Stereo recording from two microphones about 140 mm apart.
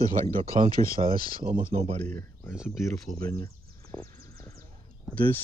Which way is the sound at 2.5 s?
Centre (ahead or behind).